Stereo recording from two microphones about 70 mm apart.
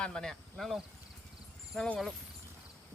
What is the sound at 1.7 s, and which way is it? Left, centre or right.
Speech, centre.